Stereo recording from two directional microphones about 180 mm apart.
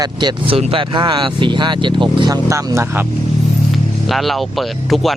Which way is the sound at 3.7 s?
Centre (ahead or behind).